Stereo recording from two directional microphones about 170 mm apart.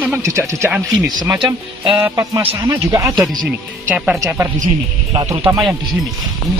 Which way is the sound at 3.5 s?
10° right (ahead or behind).